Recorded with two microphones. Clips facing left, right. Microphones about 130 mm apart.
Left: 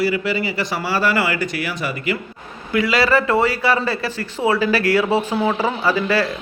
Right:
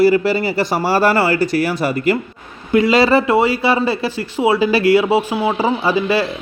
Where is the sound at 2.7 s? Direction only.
25° right (ahead or behind).